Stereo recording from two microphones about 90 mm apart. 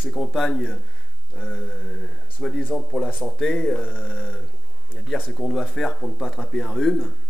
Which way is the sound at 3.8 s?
20° left (ahead or behind).